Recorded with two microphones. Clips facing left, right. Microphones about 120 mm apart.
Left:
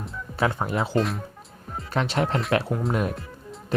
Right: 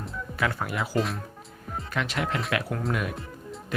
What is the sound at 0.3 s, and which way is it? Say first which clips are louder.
Speech: left 4 dB; 30° left (ahead or behind).